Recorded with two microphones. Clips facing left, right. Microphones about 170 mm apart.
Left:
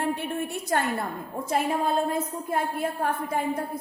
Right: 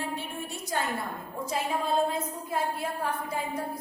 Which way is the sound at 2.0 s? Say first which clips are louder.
Left 3 dB; 50° left (ahead or behind).